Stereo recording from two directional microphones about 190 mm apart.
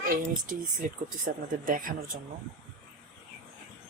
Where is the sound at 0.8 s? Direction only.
45° right (ahead or behind).